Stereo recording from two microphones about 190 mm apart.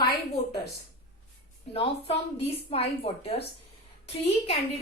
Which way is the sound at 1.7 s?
30° left (ahead or behind).